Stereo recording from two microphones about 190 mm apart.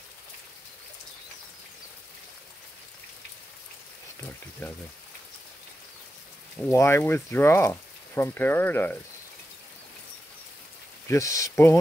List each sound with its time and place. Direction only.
6.7 s speech: 15° left (ahead or behind)
11.1 s speech: 15° left (ahead or behind)